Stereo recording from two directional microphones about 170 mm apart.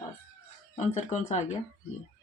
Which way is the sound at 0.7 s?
40° left (ahead or behind).